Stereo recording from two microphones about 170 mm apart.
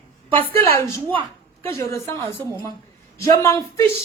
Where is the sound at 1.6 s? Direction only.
15° left (ahead or behind).